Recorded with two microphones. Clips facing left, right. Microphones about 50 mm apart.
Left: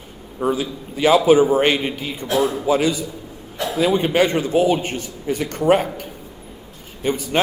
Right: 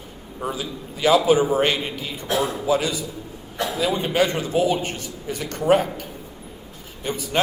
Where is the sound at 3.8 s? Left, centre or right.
Left.